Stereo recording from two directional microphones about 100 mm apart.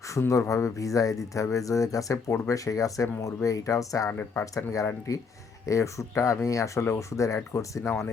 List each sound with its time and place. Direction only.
0.1 s speech: 30° left (ahead or behind)
4.1 s speech: 20° left (ahead or behind)
4.7 s speech: 35° left (ahead or behind)